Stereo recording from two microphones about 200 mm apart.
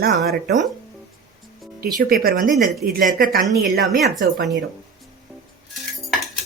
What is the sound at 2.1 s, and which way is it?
A woman's voice, 50° right (ahead or behind).